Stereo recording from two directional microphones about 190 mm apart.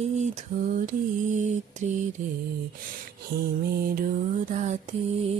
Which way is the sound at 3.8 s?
50° right (ahead or behind).